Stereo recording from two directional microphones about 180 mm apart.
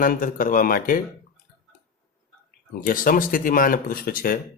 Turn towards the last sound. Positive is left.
turn(degrees=55)  # may be behind; listen again after turning